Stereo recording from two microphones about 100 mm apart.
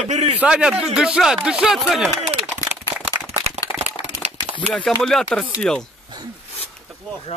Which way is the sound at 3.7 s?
65° left (ahead or behind).